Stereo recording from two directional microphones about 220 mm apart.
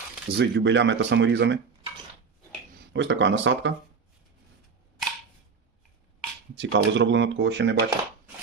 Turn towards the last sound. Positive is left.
turn(degrees=-50)  # may be behind; listen again after turning